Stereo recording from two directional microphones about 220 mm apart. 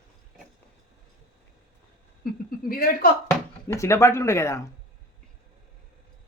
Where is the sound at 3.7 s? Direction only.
10° left (ahead or behind).